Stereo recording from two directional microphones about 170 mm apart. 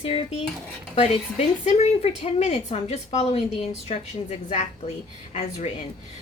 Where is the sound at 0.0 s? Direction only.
35° left (ahead or behind).